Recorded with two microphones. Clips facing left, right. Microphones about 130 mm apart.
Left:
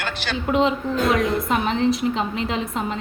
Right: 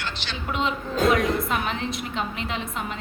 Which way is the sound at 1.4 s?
35° left (ahead or behind).